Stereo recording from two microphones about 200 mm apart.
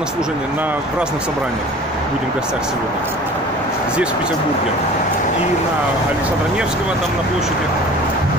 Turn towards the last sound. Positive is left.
turn(degrees=-5)  # may be behind; listen again after turning